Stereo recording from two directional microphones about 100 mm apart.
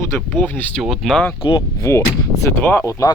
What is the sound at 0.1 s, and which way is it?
Speech, 20° left (ahead or behind).